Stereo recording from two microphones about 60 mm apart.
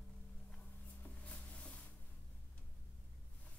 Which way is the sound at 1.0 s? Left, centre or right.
Left.